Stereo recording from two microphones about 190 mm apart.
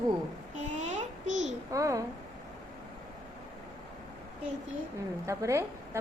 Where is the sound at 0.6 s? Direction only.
40° right (ahead or behind).